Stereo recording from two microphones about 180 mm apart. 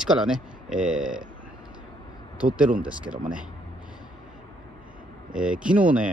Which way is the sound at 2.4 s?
5° right (ahead or behind).